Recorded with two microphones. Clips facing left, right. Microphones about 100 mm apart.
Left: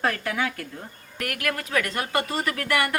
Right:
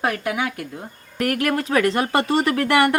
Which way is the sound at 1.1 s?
35° right (ahead or behind).